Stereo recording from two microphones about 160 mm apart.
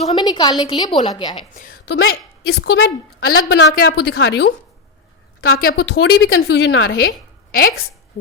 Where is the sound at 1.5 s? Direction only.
55° left (ahead or behind).